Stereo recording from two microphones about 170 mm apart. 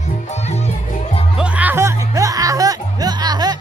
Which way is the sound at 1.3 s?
5° right (ahead or behind).